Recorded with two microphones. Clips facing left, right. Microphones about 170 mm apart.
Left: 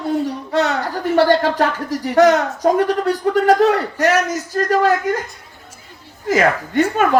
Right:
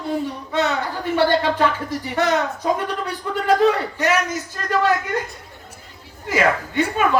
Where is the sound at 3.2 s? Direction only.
55° left (ahead or behind).